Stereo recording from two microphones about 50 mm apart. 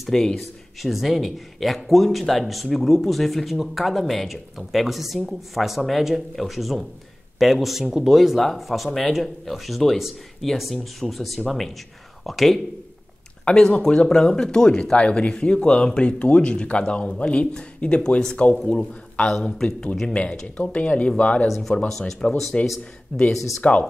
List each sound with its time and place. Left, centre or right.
0.1 s a man's voice: centre
13.5 s a man's voice: centre
20.4 s speech: left
21.6 s a man's voice: centre
22.5 s a man's voice: centre